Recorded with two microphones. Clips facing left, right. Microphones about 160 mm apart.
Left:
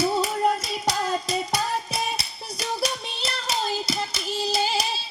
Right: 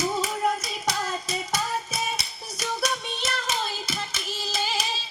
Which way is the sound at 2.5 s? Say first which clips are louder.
Left 1 dB; 35° left (ahead or behind).